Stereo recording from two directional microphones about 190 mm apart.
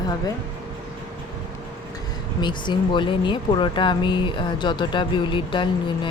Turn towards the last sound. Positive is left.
turn(degrees=25)  # may be behind; listen again after turning